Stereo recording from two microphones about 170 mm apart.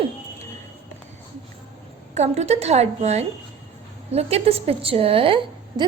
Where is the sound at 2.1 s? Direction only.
40° right (ahead or behind).